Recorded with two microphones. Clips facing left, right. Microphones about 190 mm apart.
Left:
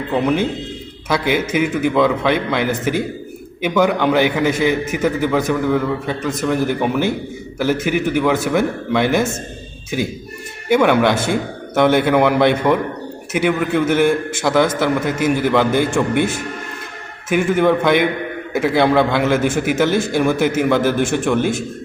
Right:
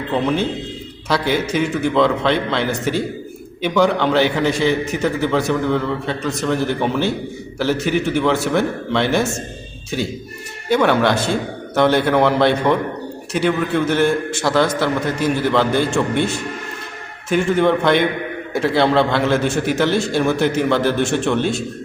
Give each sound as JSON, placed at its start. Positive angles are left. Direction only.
{"t": 0.1, "sound": "a man's voice", "side_deg": 10}
{"t": 1.5, "sound": "a man's voice", "side_deg": 10}